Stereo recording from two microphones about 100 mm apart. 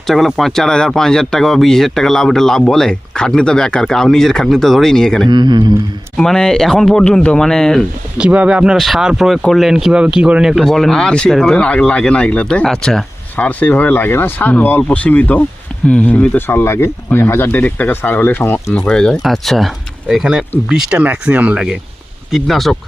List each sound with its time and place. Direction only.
0.1 s speech: centre (ahead or behind)
5.3 s speech: 50° right (ahead or behind)
6.1 s speech: 5° left (ahead or behind)
8.2 s speech: 10° right (ahead or behind)
13.3 s speech: 15° left (ahead or behind)
18.8 s speech: 10° left (ahead or behind)